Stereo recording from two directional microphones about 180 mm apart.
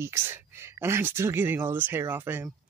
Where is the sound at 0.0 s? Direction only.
15° right (ahead or behind).